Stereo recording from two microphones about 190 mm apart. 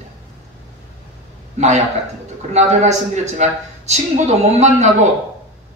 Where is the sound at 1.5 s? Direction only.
35° right (ahead or behind).